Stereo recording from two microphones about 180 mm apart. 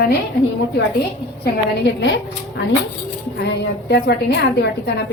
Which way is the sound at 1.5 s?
70° left (ahead or behind).